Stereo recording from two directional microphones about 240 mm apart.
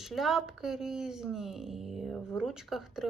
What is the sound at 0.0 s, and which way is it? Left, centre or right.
A woman's voice, centre.